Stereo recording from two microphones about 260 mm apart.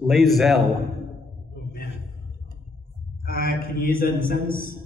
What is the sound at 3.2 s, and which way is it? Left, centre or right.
A man's voice, left.